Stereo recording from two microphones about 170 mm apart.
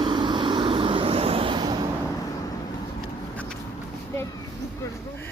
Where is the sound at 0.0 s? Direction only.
25° right (ahead or behind).